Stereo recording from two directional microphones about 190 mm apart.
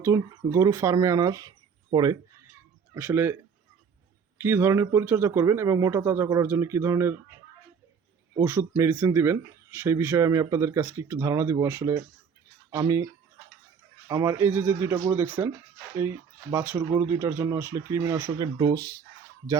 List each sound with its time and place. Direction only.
0.0 s speech: 15° right (ahead or behind)
4.4 s speech: 10° right (ahead or behind)
8.4 s speech: 10° right (ahead or behind)
14.1 s speech: 15° right (ahead or behind)